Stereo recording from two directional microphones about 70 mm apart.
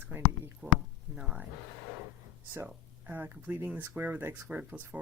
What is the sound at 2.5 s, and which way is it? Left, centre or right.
Speech, right.